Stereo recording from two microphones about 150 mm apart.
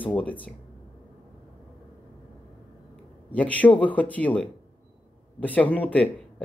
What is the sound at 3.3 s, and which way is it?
Speech, 10° left (ahead or behind).